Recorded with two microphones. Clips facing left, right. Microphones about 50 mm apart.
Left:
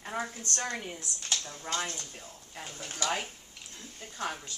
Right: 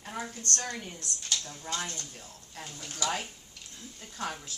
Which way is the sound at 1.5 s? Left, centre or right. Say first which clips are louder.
Left 2 dB; left.